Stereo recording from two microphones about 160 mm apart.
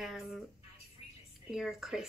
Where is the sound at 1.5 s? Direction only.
Centre (ahead or behind).